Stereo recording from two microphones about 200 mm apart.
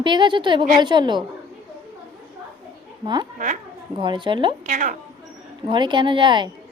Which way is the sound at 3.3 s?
40° right (ahead or behind).